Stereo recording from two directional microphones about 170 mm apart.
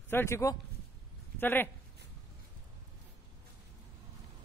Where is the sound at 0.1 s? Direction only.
15° left (ahead or behind).